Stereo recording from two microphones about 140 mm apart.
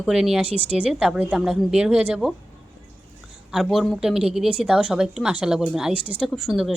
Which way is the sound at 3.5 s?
Centre (ahead or behind).